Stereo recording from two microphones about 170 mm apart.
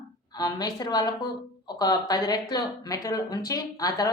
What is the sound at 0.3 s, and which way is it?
Speech, 25° left (ahead or behind).